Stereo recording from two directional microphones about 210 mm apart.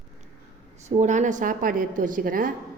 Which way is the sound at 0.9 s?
35° right (ahead or behind).